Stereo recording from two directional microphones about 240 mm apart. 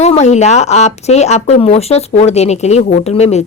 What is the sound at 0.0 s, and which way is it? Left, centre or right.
Speech, left.